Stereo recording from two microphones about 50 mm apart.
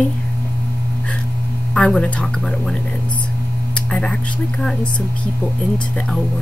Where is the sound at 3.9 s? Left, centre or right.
Centre.